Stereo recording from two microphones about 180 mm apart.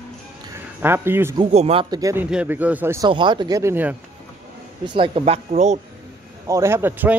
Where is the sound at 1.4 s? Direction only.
35° right (ahead or behind); by 3.1 s 15° right (ahead or behind).